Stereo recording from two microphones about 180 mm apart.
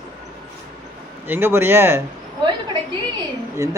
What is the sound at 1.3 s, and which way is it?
Speech, 10° right (ahead or behind).